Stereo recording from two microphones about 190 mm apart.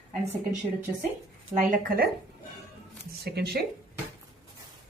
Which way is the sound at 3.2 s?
55° right (ahead or behind).